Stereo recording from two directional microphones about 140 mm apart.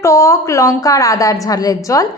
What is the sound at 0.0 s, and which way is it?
A woman's voice, 20° left (ahead or behind).